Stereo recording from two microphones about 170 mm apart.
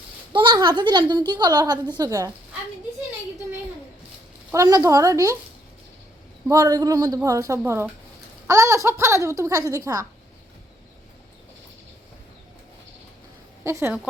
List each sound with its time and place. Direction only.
0.3 s speech: 25° right (ahead or behind)
4.5 s speech: 20° right (ahead or behind)
6.5 s a woman's voice: 20° right (ahead or behind)
13.7 s a woman's voice: 15° right (ahead or behind)